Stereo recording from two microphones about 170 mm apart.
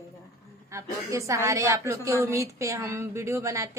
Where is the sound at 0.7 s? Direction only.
15° right (ahead or behind).